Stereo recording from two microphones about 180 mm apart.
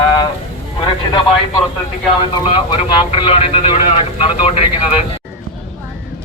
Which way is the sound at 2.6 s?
25° left (ahead or behind).